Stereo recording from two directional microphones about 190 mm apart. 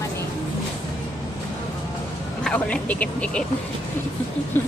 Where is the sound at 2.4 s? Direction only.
5° left (ahead or behind).